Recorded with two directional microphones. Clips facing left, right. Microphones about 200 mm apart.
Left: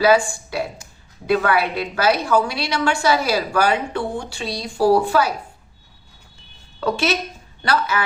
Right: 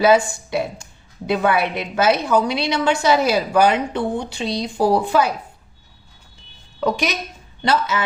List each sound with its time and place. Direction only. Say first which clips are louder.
0.0 s a woman's voice: right 1 dB; 20° right (ahead or behind)
6.7 s a woman's voice: left 1 dB; 15° right (ahead or behind)